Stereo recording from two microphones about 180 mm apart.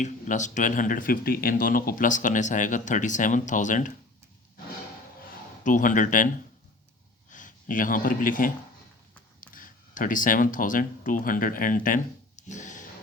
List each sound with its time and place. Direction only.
0.0 s speech: 45° left (ahead or behind)
5.6 s a man's voice: 45° left (ahead or behind)
12.4 s a sound: 40° left (ahead or behind)